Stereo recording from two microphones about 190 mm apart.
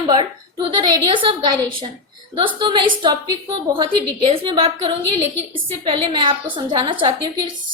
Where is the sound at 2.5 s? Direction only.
25° right (ahead or behind).